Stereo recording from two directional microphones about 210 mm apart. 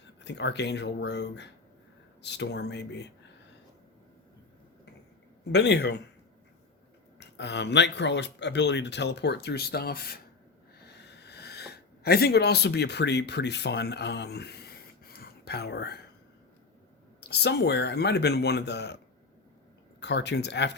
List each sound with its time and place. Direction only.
0.3 s speech: 55° left (ahead or behind)
5.5 s speech: 55° left (ahead or behind)
7.2 s speech: 55° left (ahead or behind)
10.8 s a sound: 50° left (ahead or behind)
17.2 s speech: 50° left (ahead or behind)
20.0 s speech: 55° left (ahead or behind)